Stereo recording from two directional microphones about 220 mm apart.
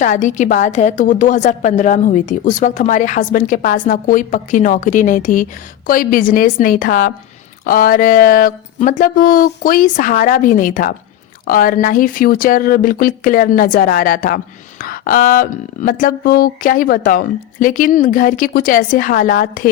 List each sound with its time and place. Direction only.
0.0 s a woman's voice: 35° left (ahead or behind)